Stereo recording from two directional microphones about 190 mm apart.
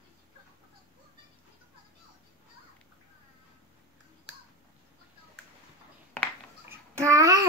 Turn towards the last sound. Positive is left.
turn(degrees=-20)  # may be behind; listen again after turning